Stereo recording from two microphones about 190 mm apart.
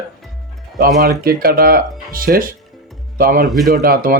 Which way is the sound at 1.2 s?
50° right (ahead or behind).